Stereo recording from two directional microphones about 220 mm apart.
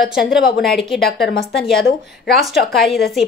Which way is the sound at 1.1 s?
45° left (ahead or behind).